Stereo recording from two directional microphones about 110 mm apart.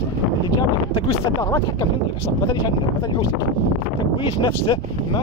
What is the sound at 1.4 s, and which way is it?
Speech, 30° left (ahead or behind).